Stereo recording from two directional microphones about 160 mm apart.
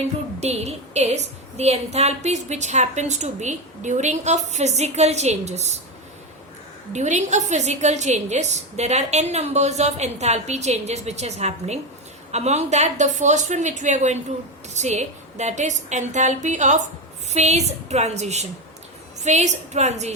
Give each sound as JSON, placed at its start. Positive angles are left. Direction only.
{"t": 0.3, "sound": "a woman's voice", "side_deg": -40}
{"t": 6.9, "sound": "a woman's voice", "side_deg": -45}